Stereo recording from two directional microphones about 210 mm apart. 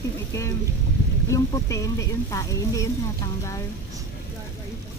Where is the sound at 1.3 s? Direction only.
15° left (ahead or behind).